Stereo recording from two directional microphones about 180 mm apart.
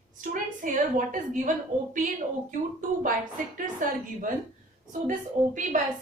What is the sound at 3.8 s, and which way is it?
Speech, 50° right (ahead or behind).